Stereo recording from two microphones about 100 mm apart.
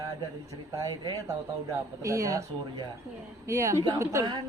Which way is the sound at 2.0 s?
30° right (ahead or behind).